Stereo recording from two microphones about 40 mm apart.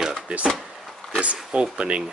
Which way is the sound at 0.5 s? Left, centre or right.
Centre.